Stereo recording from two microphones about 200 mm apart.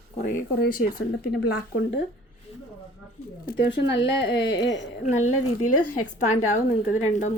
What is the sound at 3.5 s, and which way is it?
Speech, 65° left (ahead or behind).